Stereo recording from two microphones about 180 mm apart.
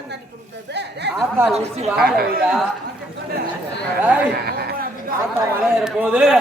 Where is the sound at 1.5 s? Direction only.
35° right (ahead or behind).